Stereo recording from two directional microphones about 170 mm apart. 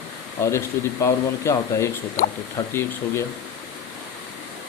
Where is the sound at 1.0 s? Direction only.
15° left (ahead or behind).